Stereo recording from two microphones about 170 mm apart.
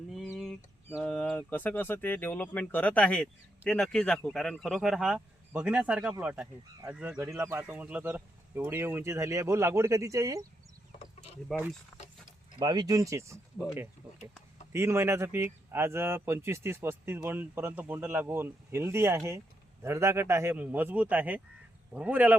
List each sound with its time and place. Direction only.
0.1 s a sound: centre (ahead or behind)
0.9 s speech: 10° left (ahead or behind); by 10.4 s 20° right (ahead or behind)
11.5 s speech: 5° left (ahead or behind)
12.5 s speech: 25° right (ahead or behind)
14.7 s speech: 15° right (ahead or behind)